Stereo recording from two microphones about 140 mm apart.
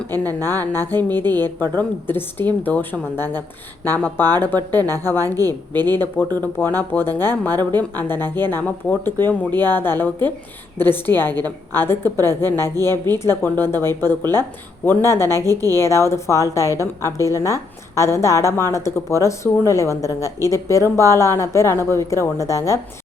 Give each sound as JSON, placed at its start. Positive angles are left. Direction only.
{"t": 0.1, "sound": "speech", "side_deg": -25}
{"t": 0.7, "sound": "speech", "side_deg": 15}
{"t": 1.2, "sound": "speech", "side_deg": -30}
{"t": 1.5, "sound": "speech", "side_deg": 15}
{"t": 5.1, "sound": "speech", "side_deg": -25}
{"t": 6.3, "sound": "a woman's voice", "side_deg": 15}